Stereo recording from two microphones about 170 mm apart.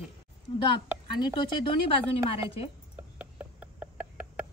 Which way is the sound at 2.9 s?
10° right (ahead or behind).